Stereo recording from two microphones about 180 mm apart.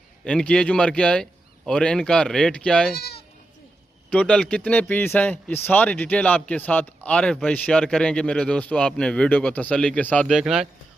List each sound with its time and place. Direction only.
0.3 s speech: 5° left (ahead or behind)
2.9 s speech: 65° left (ahead or behind)
4.1 s speech: 5° left (ahead or behind)
10.2 s speech: 5° right (ahead or behind)